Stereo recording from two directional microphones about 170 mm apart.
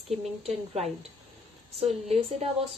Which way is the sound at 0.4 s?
40° right (ahead or behind).